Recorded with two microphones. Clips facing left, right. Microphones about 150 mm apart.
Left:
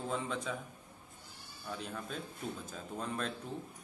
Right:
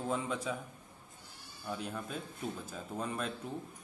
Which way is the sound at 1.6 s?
10° right (ahead or behind).